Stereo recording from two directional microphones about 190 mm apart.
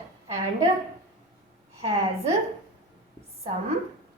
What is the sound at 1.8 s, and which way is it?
Speech, 35° right (ahead or behind).